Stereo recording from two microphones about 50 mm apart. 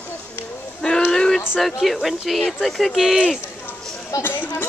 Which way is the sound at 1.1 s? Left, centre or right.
Centre.